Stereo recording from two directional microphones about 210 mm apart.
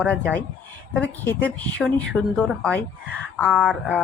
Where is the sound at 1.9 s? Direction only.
5° left (ahead or behind).